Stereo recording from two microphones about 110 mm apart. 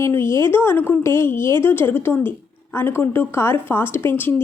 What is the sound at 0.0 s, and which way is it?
A woman's voice, 25° left (ahead or behind).